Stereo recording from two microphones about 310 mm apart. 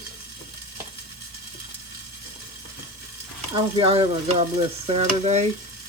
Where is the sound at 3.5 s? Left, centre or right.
Centre.